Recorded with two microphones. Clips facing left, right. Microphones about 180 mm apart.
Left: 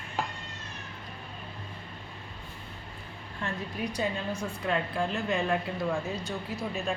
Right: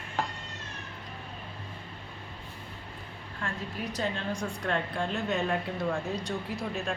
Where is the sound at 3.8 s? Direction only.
10° left (ahead or behind).